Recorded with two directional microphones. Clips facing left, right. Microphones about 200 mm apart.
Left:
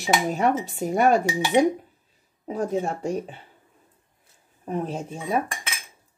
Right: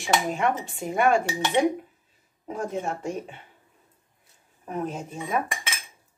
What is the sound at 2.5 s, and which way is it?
Speech, 35° left (ahead or behind).